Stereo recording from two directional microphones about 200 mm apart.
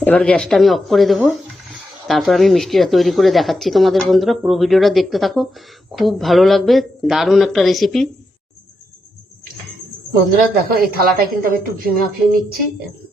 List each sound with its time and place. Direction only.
0.0 s speech: 5° left (ahead or behind)
10.7 s a woman's voice: 50° right (ahead or behind)